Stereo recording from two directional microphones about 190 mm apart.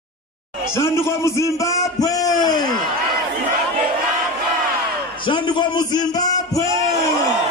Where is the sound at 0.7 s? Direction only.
15° left (ahead or behind).